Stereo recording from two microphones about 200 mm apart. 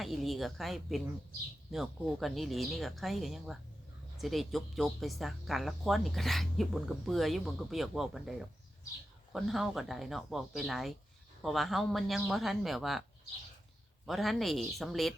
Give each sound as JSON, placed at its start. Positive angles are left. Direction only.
{"t": 0.0, "sound": "speech", "side_deg": 0}
{"t": 14.1, "sound": "speech", "side_deg": 0}